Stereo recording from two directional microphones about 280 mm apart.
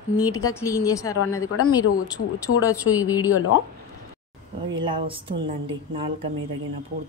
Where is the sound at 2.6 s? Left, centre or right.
Centre.